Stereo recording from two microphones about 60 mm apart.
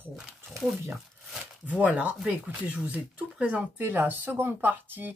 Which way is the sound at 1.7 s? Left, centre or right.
Right.